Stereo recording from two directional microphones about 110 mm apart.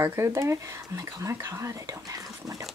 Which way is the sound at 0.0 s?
25° right (ahead or behind).